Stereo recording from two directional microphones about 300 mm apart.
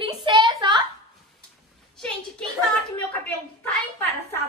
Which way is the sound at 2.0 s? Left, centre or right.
Centre.